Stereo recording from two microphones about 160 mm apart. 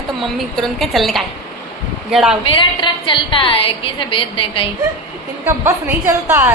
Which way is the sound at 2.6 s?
30° left (ahead or behind).